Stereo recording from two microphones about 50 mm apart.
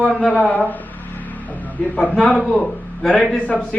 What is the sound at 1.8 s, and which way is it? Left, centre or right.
A man's voice, left.